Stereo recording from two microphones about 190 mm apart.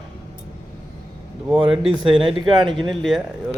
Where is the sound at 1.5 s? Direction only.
25° right (ahead or behind).